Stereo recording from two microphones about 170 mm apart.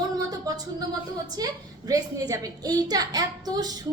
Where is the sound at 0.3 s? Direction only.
20° right (ahead or behind).